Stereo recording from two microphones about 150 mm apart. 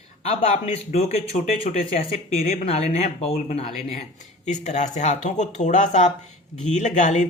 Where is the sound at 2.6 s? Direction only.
45° left (ahead or behind).